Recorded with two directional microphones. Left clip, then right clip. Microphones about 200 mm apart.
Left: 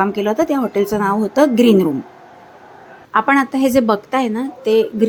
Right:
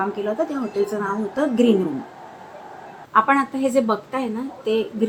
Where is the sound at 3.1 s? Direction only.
40° left (ahead or behind).